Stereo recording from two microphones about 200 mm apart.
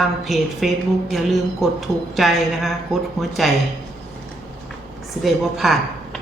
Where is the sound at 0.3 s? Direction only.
Centre (ahead or behind).